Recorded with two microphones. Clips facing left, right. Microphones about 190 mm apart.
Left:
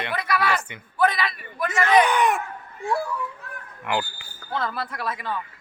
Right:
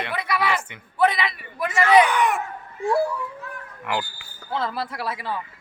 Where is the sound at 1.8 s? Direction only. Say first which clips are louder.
Right 1 dB; 20° left (ahead or behind).